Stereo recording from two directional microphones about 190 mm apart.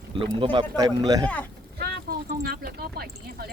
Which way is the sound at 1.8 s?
55° right (ahead or behind).